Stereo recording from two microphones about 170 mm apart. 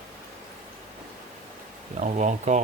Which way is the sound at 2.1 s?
45° right (ahead or behind).